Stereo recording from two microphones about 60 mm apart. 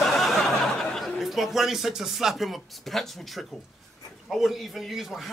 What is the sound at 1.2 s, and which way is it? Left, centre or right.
Speech, centre.